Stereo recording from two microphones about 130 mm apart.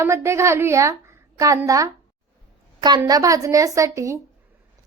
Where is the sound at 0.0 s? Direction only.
20° right (ahead or behind).